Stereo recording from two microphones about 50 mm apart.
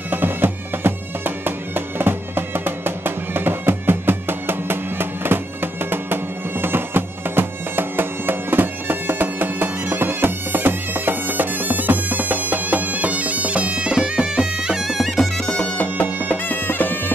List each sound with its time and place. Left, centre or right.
0.1 s music: right
6.6 s bagpipes: right; by 15.0 s centre
15.0 s bagpipes: centre
15.5 s bagpipes: left
16.3 s bagpipes: left